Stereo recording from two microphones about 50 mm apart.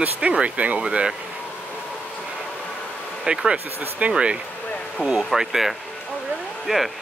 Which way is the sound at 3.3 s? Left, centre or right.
Right.